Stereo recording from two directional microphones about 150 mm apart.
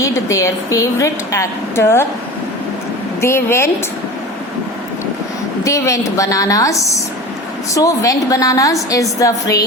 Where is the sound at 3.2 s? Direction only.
15° left (ahead or behind).